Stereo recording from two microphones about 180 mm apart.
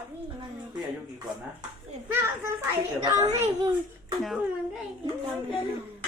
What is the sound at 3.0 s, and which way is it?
Speech, 20° right (ahead or behind).